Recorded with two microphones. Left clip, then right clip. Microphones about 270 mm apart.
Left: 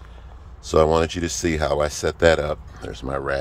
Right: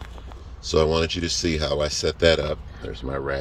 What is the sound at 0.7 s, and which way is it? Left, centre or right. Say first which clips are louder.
Speech: left 3 dB; left.